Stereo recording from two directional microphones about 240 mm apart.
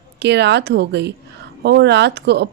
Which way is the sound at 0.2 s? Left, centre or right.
Right.